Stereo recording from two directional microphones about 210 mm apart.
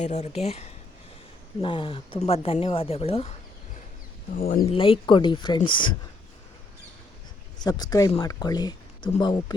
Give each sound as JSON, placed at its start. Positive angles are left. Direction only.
{"t": 0.0, "sound": "speech", "side_deg": 35}
{"t": 4.4, "sound": "speech", "side_deg": 40}
{"t": 4.7, "sound": "speech", "side_deg": 25}
{"t": 7.6, "sound": "speech", "side_deg": 20}